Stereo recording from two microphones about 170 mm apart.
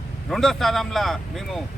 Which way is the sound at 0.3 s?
Centre (ahead or behind).